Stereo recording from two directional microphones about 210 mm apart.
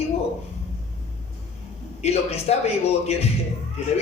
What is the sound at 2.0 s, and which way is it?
A man's voice, 30° left (ahead or behind).